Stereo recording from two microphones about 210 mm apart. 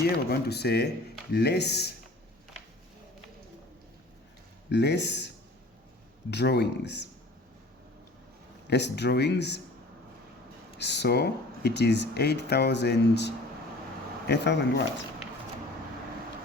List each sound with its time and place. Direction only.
0.3 s speech: 50° left (ahead or behind)
4.7 s speech: 55° left (ahead or behind)
6.3 s speech: 55° left (ahead or behind)
8.6 s speech: 55° left (ahead or behind)
10.8 s speech: 55° left (ahead or behind)